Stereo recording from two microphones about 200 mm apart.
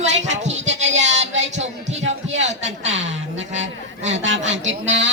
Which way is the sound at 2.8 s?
65° right (ahead or behind).